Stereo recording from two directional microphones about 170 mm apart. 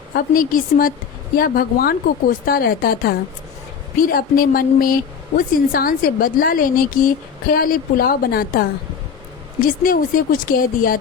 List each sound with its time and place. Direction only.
0.1 s speech: 60° left (ahead or behind)
9.6 s speech: 55° left (ahead or behind)